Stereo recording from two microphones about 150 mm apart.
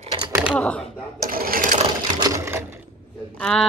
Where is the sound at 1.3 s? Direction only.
75° right (ahead or behind).